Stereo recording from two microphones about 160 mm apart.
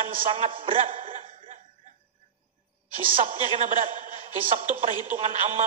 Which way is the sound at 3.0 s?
35° right (ahead or behind).